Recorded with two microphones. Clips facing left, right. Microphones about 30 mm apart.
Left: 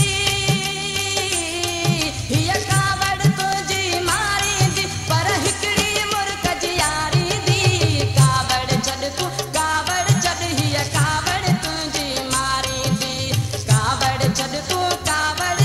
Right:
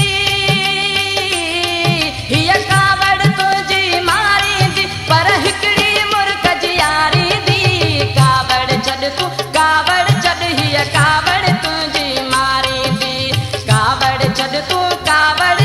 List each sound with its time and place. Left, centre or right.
1.9 s music: right
15.0 s music: right